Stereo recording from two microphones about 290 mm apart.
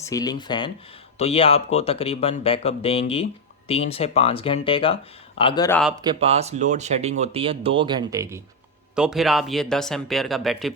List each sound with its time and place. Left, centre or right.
0.0 s speech: centre
6.0 s speech: centre